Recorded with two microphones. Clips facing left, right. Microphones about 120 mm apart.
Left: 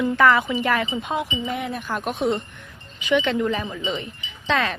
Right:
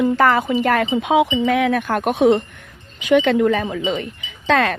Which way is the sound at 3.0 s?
50° right (ahead or behind).